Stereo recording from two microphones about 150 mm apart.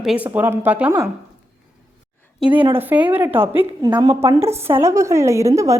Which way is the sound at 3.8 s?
30° right (ahead or behind).